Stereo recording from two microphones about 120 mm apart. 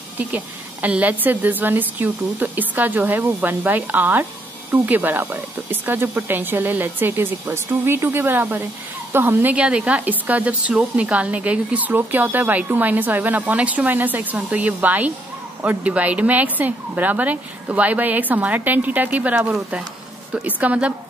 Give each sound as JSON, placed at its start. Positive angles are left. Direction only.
{"t": 0.2, "sound": "a woman's voice", "side_deg": -10}